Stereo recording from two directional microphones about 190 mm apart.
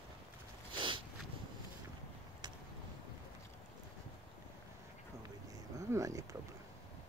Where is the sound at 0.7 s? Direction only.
25° right (ahead or behind).